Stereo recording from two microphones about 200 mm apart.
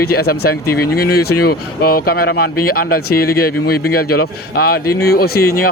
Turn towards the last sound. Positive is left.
turn(degrees=50)  # may be behind; listen again after turning